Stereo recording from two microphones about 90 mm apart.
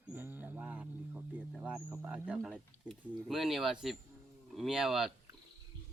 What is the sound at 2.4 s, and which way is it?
Speech, centre (ahead or behind).